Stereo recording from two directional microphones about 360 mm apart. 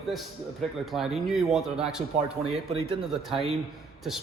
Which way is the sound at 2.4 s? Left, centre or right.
Centre.